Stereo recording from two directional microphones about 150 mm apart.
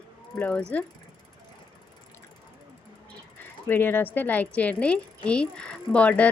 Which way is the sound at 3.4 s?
15° left (ahead or behind).